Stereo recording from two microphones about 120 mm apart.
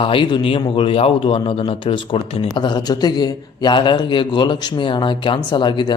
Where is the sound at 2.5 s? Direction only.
40° left (ahead or behind).